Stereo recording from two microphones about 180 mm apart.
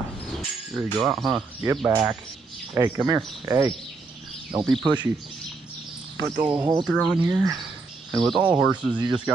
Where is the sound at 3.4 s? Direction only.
15° right (ahead or behind).